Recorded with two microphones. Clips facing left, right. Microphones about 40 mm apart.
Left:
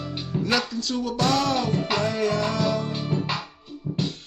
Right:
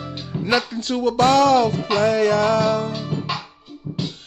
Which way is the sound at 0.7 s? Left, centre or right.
Right.